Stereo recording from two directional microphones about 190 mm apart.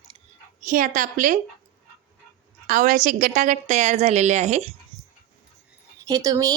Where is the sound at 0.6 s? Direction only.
45° right (ahead or behind).